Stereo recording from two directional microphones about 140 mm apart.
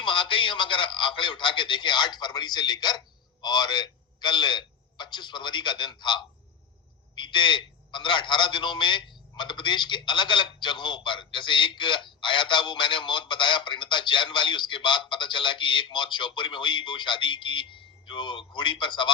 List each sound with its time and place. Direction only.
0.0 s a man's voice: 35° left (ahead or behind)